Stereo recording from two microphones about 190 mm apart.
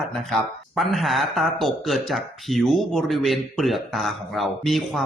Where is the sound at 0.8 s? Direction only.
Centre (ahead or behind).